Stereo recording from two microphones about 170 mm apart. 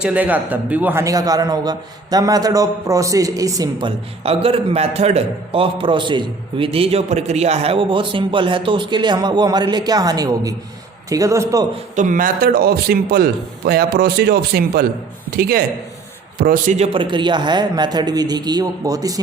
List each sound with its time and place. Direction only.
0.0 s a man's voice: 10° right (ahead or behind)
11.9 s a man's voice: 50° right (ahead or behind)
16.7 s a man's voice: 35° right (ahead or behind)